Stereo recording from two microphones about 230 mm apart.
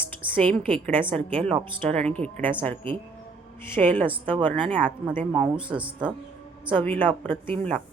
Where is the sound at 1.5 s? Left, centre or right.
Right.